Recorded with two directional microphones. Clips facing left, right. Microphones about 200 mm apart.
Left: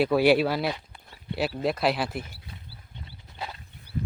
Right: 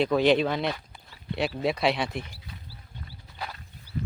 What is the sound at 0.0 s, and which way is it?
Speech, 10° left (ahead or behind).